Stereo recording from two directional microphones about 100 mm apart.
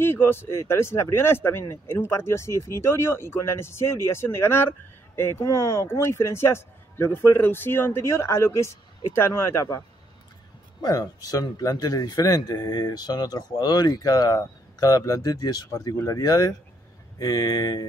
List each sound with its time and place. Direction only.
0.0 s speech: 25° left (ahead or behind); by 17.8 s 40° left (ahead or behind)